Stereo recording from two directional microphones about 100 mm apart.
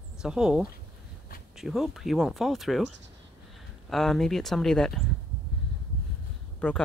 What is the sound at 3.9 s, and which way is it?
Speech, centre (ahead or behind).